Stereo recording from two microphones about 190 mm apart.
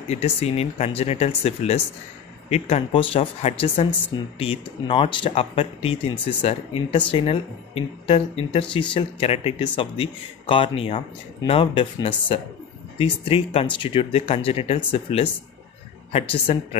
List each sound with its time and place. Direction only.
0.1 s speech: 35° left (ahead or behind)